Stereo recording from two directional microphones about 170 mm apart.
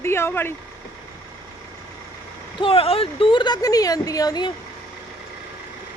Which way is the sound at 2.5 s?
30° left (ahead or behind).